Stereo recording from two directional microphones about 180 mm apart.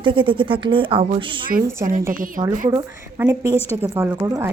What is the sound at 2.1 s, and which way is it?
Speech, 50° right (ahead or behind).